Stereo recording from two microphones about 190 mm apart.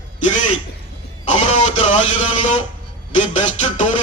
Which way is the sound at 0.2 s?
40° left (ahead or behind).